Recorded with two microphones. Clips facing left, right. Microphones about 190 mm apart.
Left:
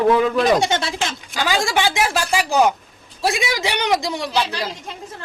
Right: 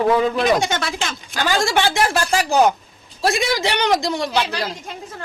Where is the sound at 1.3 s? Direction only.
15° left (ahead or behind).